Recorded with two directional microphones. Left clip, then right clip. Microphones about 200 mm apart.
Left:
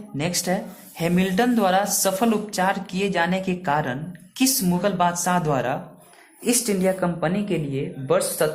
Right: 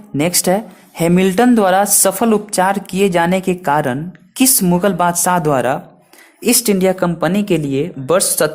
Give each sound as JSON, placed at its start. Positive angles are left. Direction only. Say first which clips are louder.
{"t": 0.2, "sound": "speech", "louder": "right 10 dB", "side_deg": -50}
{"t": 6.4, "sound": "speech", "louder": "right 8 dB", "side_deg": -35}